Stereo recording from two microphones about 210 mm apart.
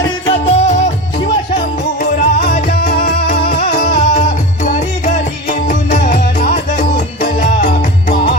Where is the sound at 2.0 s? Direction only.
45° left (ahead or behind).